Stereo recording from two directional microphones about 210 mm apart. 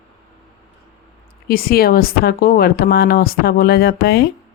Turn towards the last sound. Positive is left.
turn(degrees=50)  # may be behind; listen again after turning